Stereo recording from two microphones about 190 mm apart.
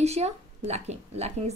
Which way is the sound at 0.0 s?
35° right (ahead or behind).